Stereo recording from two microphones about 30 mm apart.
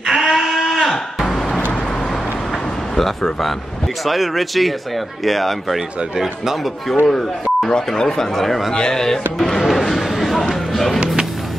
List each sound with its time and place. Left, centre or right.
0.2 s sheep: centre
1.2 s vehicle: centre
4.0 s speech: centre
6.1 s speech: centre
6.9 s speech: centre
8.7 s speech: left
9.7 s a sound: centre
10.2 s music: centre